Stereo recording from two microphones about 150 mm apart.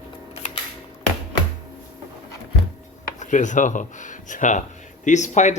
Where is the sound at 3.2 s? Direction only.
55° left (ahead or behind).